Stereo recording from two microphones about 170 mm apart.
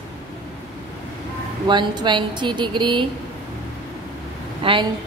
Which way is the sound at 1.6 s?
25° right (ahead or behind).